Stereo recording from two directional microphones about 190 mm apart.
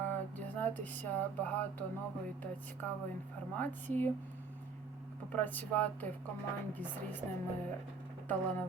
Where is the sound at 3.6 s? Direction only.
10° left (ahead or behind).